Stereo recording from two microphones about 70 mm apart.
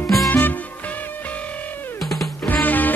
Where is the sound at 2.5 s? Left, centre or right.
Left.